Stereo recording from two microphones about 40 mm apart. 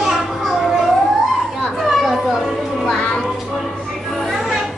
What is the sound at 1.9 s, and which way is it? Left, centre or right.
Children playing, centre.